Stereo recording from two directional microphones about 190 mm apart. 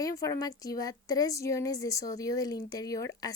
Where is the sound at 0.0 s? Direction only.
15° left (ahead or behind).